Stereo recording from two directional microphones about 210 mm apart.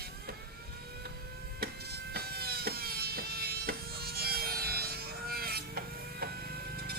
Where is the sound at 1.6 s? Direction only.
45° right (ahead or behind).